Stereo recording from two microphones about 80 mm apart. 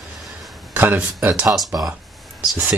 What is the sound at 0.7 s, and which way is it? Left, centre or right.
Speech, right.